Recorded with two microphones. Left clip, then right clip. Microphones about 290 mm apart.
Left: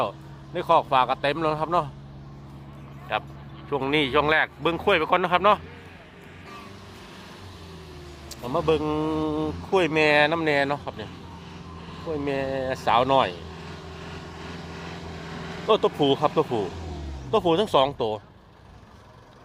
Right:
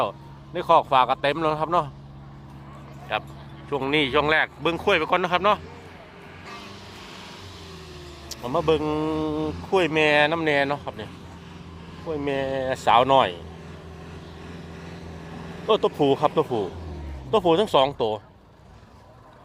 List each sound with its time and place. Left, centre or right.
0.5 s a man's voice: centre
3.1 s a man's voice: centre
8.3 s a man's voice: centre
14.3 s vehicle: centre
15.6 s a man's voice: centre